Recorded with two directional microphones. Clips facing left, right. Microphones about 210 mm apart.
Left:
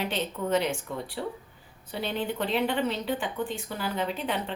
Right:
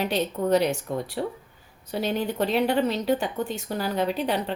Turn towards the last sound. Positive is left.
turn(degrees=-35)  # may be behind; listen again after turning